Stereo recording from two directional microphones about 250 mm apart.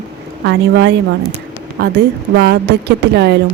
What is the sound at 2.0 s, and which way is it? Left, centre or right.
Speech, right.